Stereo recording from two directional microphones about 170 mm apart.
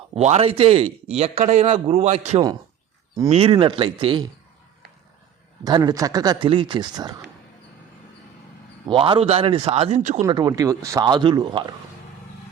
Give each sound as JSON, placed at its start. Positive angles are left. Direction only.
{"t": 0.1, "sound": "a man's voice", "side_deg": -40}
{"t": 5.6, "sound": "speech", "side_deg": -20}
{"t": 8.9, "sound": "a man's voice", "side_deg": -30}
{"t": 10.2, "sound": "speech", "side_deg": -25}